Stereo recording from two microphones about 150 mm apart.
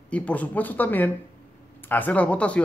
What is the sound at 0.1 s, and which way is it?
A man's voice, 10° left (ahead or behind).